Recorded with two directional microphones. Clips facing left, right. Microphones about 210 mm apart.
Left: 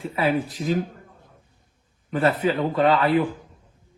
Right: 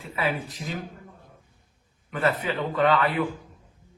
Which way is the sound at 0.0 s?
35° left (ahead or behind).